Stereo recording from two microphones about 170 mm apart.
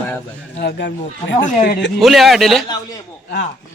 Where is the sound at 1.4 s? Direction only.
45° left (ahead or behind).